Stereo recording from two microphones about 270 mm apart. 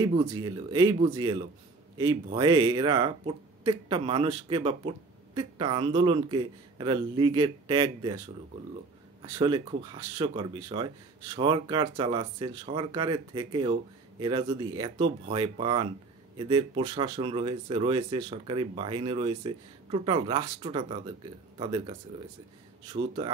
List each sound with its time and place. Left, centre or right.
0.0 s speech: centre
9.2 s speech: centre